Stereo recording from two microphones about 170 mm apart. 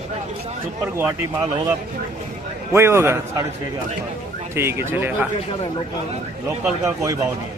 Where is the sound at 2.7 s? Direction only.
15° right (ahead or behind).